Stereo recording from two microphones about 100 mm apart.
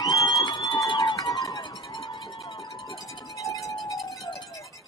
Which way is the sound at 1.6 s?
45° left (ahead or behind).